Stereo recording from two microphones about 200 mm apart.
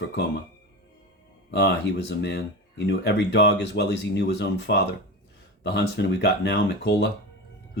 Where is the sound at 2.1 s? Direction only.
60° left (ahead or behind).